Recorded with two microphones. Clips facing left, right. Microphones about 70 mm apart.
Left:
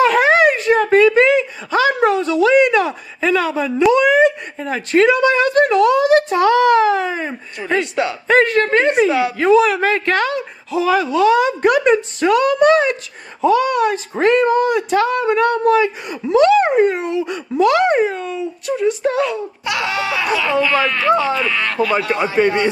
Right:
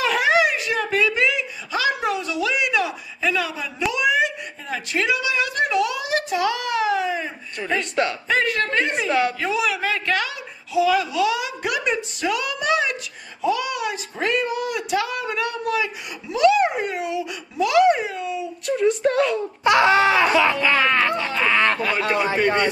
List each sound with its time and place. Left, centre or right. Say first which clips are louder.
0.0 s a sound: left 7 dB; left
3.9 s speech: left 7 dB; left
7.8 s speech: left 3 dB; centre
8.3 s speech: left 8 dB; left
18.7 s speech: left 1 dB; centre
19.6 s speech: right 7 dB; right
22.1 s a man's voice: left 3 dB; left